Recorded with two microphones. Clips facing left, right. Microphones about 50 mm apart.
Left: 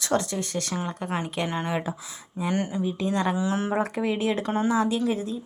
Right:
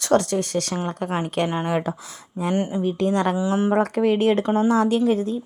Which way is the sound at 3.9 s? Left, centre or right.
Right.